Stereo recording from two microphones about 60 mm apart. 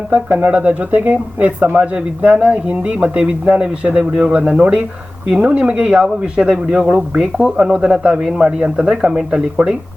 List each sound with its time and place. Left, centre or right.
0.1 s speech: right; by 9.7 s centre